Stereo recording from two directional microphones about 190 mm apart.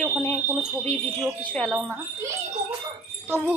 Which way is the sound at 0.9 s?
5° left (ahead or behind).